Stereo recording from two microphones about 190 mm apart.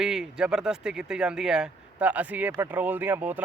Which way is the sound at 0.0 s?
5° right (ahead or behind).